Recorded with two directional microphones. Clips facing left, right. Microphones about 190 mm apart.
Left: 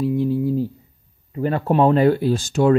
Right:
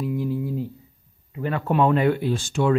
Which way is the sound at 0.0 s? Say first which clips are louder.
Left 6 dB; 30° left (ahead or behind).